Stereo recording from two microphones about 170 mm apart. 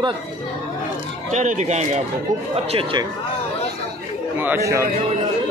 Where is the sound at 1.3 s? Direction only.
45° right (ahead or behind).